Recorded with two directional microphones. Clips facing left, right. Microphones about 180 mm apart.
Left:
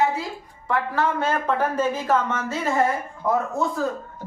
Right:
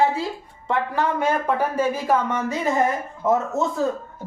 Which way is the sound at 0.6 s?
20° right (ahead or behind).